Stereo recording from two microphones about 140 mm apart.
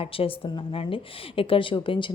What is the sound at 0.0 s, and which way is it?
A woman's voice, 40° left (ahead or behind).